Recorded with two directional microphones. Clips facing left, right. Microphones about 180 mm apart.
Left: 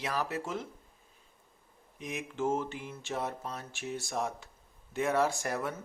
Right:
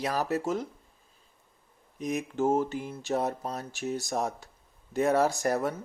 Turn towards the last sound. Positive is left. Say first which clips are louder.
# right 5 dB
turn(degrees=-40)  # may be behind; listen again after turning